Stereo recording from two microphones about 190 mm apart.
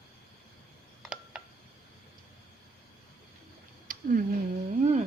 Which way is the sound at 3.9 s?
45° right (ahead or behind).